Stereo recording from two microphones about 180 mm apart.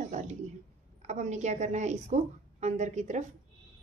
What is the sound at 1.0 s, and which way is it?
A woman's voice, 40° right (ahead or behind).